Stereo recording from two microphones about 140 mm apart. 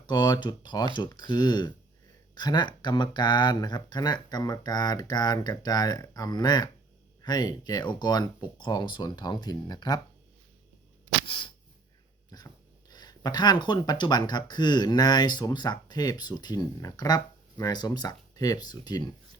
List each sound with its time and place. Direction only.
0.0 s speech: 30° left (ahead or behind)
11.3 s a sound: 35° left (ahead or behind)
12.9 s speech: 30° left (ahead or behind)